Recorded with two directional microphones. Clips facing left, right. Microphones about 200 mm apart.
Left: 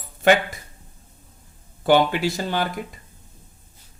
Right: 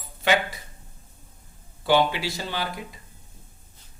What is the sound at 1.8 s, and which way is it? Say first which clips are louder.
Speech: left 4 dB; 50° left (ahead or behind).